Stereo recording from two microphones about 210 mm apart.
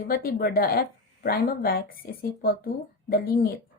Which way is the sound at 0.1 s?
45° left (ahead or behind).